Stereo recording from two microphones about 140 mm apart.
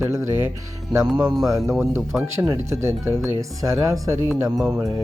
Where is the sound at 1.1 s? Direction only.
30° right (ahead or behind).